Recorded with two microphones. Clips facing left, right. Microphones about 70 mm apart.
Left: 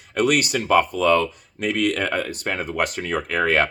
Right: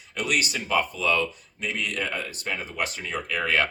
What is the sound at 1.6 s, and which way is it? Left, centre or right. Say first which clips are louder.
Speech: left 8 dB; left.